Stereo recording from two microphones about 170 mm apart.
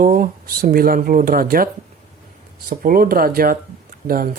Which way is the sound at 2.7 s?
55° right (ahead or behind).